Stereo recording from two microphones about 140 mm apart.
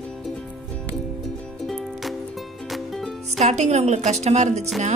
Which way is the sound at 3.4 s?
55° right (ahead or behind).